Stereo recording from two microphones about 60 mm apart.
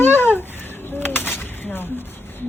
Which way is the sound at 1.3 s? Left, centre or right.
Left.